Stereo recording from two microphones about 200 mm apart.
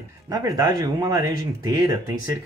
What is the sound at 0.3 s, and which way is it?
Speech, 20° right (ahead or behind).